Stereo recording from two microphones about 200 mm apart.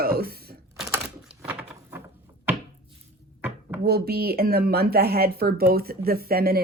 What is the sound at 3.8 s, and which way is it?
Speech, 50° right (ahead or behind).